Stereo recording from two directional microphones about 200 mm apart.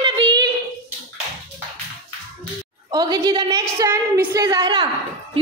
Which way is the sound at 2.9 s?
20° right (ahead or behind).